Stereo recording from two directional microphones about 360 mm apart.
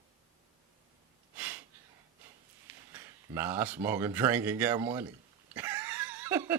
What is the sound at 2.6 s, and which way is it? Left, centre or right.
Speech, centre.